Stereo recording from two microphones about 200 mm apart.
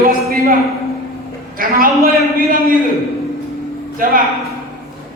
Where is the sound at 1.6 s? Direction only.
45° right (ahead or behind).